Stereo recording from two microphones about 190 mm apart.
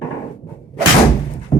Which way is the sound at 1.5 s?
20° left (ahead or behind).